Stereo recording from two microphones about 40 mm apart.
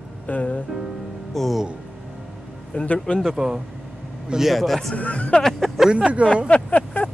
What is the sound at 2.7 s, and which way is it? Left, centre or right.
Speech, left.